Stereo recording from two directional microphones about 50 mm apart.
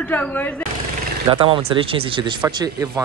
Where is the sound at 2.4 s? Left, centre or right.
Right.